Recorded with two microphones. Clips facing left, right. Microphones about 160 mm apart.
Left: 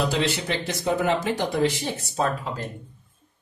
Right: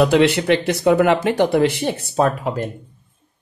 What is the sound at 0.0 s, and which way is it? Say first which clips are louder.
Speech: right 10 dB; 70° right (ahead or behind).